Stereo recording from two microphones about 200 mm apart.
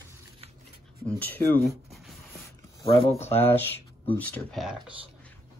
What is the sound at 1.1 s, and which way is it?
Speech, 10° left (ahead or behind).